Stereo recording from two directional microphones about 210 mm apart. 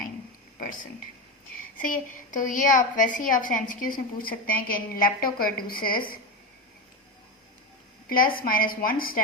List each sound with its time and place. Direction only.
0.6 s a woman's voice: 40° left (ahead or behind)
8.1 s a woman's voice: 45° left (ahead or behind)